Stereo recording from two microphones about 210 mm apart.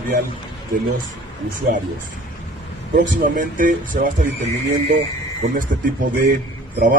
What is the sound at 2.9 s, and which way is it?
Speech, 40° right (ahead or behind).